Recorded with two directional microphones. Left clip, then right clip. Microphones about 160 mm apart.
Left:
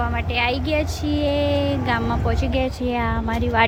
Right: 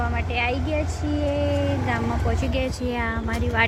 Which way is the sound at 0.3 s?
25° left (ahead or behind).